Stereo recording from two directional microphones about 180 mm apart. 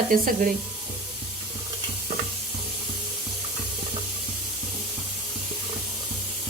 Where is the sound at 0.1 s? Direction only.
50° right (ahead or behind).